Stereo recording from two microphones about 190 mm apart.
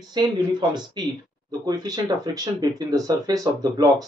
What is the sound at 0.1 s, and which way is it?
Speech, 20° right (ahead or behind).